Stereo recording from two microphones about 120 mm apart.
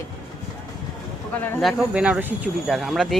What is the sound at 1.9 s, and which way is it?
Speech, 10° right (ahead or behind).